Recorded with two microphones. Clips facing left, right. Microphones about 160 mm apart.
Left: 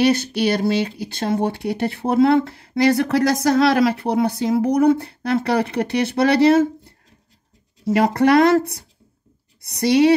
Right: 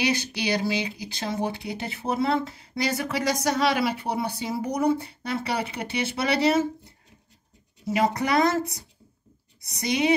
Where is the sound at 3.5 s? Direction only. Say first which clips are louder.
Left 8 dB; 85° left; by 10.1 s 65° left (ahead or behind).